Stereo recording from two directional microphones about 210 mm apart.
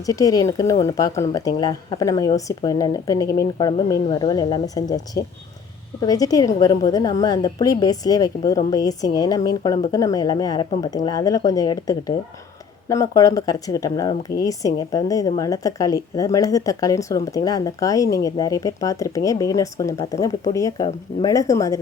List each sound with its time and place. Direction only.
0.0 s a woman's voice: 15° left (ahead or behind)